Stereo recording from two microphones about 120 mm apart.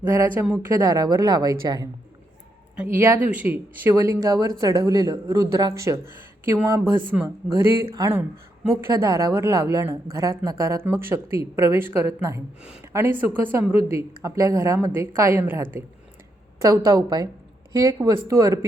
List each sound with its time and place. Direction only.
0.1 s a woman's voice: 25° right (ahead or behind)
2.8 s a woman's voice: 20° right (ahead or behind)